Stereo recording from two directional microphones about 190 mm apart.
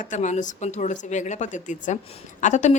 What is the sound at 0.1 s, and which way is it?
A woman's voice, 40° left (ahead or behind).